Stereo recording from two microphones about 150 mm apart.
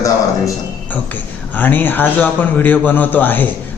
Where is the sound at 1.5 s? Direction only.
10° left (ahead or behind).